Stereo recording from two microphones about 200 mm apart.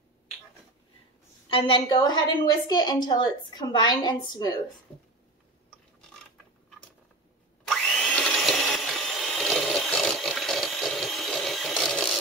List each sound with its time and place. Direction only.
1.5 s a woman's voice: 25° left (ahead or behind)
7.6 s vacuum cleaner: 5° left (ahead or behind)